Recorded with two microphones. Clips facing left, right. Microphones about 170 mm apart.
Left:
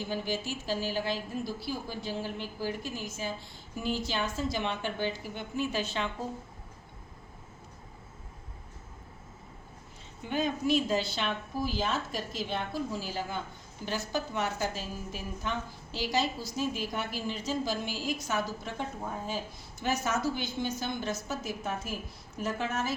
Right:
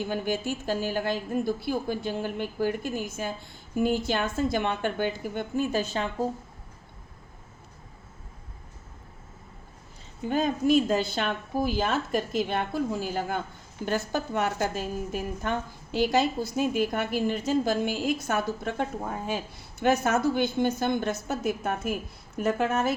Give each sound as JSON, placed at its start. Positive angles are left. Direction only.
{"t": 0.0, "sound": "a woman's voice", "side_deg": -55}
{"t": 10.2, "sound": "a woman's voice", "side_deg": -45}